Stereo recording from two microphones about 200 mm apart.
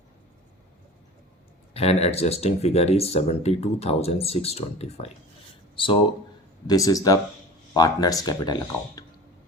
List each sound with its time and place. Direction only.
1.7 s speech: 30° left (ahead or behind)
6.7 s speech: 15° left (ahead or behind)